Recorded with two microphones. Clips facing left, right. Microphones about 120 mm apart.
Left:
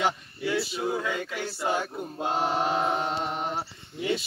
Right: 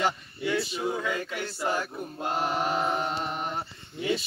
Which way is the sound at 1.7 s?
25° left (ahead or behind).